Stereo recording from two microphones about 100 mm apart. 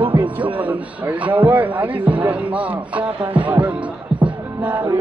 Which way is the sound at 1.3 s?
15° right (ahead or behind).